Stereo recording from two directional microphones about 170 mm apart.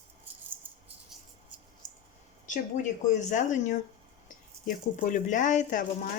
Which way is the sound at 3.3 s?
50° left (ahead or behind).